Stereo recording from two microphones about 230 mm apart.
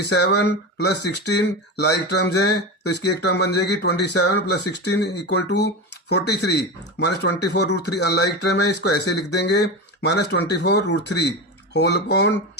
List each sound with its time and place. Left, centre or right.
0.0 s speech: left